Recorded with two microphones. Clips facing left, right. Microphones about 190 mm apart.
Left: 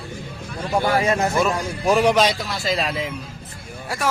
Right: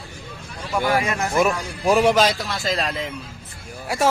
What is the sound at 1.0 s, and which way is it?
Speech, 30° left (ahead or behind).